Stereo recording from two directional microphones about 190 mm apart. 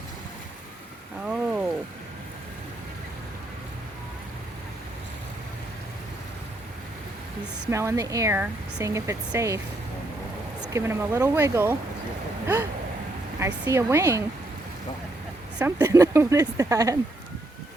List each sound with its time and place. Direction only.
1.2 s rain on surface: 5° right (ahead or behind)
7.7 s speech: 15° right (ahead or behind)
10.7 s speech: 15° right (ahead or behind)
13.4 s speech: 15° right (ahead or behind)
15.5 s speech: 15° right (ahead or behind)